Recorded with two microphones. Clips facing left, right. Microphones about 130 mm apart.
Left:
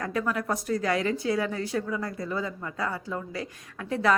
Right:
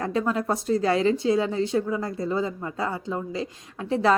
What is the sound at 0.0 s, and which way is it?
A woman's voice, 25° right (ahead or behind).